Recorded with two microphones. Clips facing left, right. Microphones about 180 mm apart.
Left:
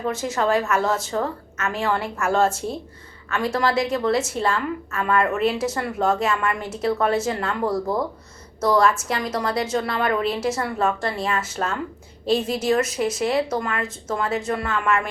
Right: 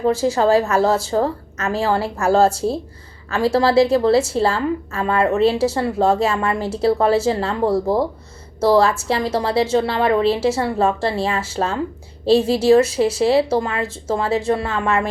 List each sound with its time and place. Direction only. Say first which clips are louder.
0.0 s a woman's voice: right 7 dB; 30° right (ahead or behind)